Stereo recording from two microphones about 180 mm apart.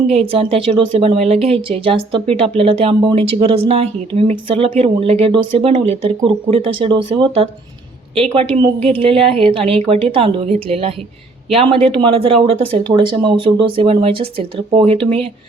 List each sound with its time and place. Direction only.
0.1 s speech: 35° right (ahead or behind)